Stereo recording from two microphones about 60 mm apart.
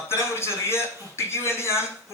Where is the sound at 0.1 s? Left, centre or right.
Left.